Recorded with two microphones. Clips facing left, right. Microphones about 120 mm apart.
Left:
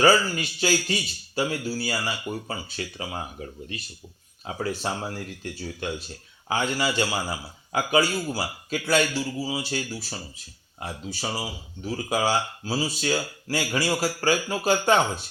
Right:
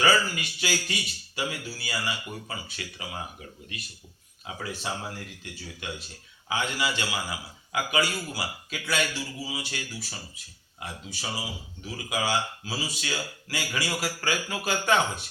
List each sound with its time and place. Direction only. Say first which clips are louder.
0.0 s a man's voice: left 4 dB; 35° left (ahead or behind)